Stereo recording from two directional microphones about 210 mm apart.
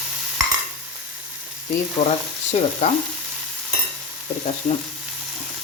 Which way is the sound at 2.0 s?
30° left (ahead or behind).